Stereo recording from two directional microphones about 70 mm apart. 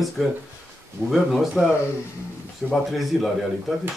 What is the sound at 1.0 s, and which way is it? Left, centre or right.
Speech, centre.